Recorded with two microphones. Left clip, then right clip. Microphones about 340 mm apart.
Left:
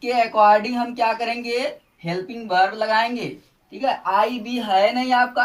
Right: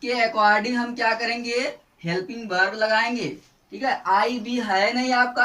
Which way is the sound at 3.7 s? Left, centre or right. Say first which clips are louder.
Left 1 dB; centre.